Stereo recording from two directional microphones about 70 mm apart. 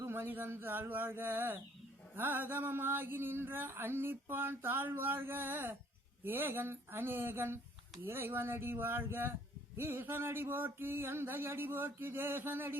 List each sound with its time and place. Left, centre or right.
0.0 s speech: right